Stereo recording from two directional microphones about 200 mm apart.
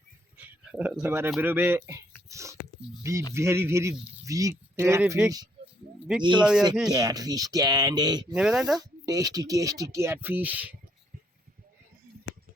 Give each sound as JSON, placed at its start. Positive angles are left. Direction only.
{"t": 0.3, "sound": "speech", "side_deg": -5}
{"t": 2.3, "sound": "whispering", "side_deg": -15}
{"t": 3.0, "sound": "speech", "side_deg": -15}
{"t": 6.1, "sound": "speech", "side_deg": 0}
{"t": 6.9, "sound": "speech", "side_deg": -20}
{"t": 8.4, "sound": "speech", "side_deg": 0}
{"t": 8.8, "sound": "speech", "side_deg": -20}